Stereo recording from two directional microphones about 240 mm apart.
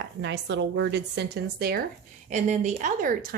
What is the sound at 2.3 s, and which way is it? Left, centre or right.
A woman's voice, right.